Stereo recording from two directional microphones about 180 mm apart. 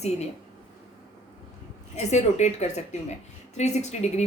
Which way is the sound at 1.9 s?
40° left (ahead or behind).